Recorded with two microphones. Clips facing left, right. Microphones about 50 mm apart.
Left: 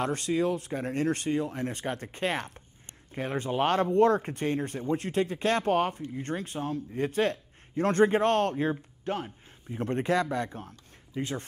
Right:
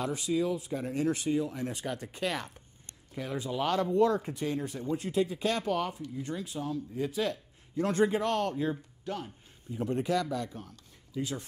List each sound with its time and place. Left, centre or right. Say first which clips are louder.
0.0 s speech: left 4 dB; left
0.3 s speech: left 1 dB; left